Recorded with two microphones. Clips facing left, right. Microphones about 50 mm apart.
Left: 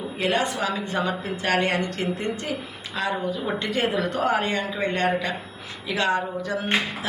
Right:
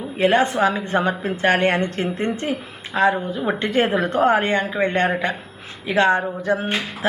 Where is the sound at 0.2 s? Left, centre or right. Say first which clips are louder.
Right 7 dB; right.